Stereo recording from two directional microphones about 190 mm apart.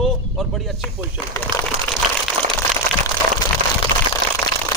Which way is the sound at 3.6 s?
45° right (ahead or behind).